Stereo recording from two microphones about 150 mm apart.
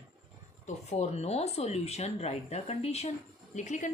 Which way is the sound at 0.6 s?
45° left (ahead or behind).